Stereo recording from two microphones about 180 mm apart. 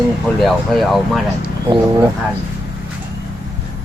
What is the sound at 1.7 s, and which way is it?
Speech, 20° right (ahead or behind).